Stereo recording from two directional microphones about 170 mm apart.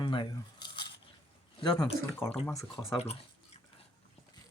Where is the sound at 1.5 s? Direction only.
25° left (ahead or behind).